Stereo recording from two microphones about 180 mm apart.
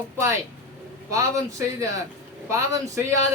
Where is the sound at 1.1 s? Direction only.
15° right (ahead or behind).